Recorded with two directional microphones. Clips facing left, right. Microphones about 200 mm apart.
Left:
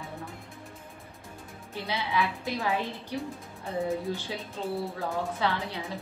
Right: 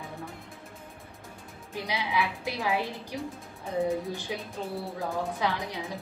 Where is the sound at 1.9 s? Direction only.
15° right (ahead or behind).